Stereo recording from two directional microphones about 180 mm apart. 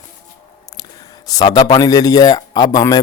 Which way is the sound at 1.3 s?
20° left (ahead or behind).